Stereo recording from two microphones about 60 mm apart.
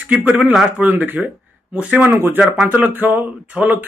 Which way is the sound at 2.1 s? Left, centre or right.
Right.